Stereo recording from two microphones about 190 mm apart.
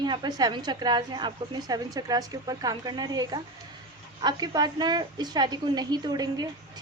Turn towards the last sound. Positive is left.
turn(degrees=-20)  # may be behind; listen again after turning